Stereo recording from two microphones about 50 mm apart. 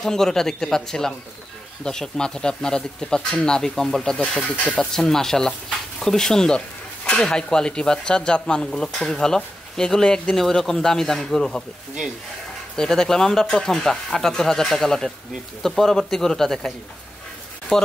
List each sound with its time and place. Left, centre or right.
0.0 s speech: centre
4.4 s speech: centre
4.7 s speech: centre
12.7 s speech: centre